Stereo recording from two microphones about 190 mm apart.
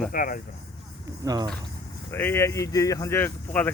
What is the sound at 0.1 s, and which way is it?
Speech, 45° left (ahead or behind).